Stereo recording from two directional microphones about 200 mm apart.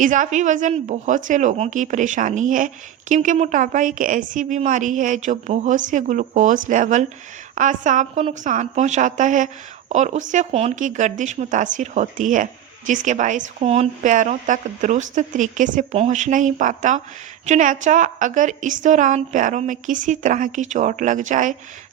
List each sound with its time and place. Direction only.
0.0 s speech: 40° right (ahead or behind)